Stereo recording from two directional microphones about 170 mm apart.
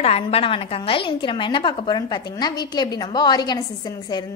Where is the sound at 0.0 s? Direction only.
35° left (ahead or behind).